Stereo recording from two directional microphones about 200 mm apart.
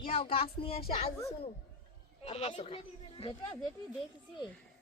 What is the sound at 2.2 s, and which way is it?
Speech, 30° left (ahead or behind).